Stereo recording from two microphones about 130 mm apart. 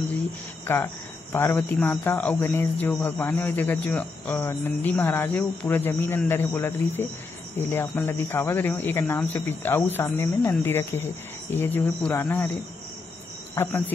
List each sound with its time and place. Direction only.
0.7 s speech: 15° left (ahead or behind)
13.6 s speech: 15° left (ahead or behind)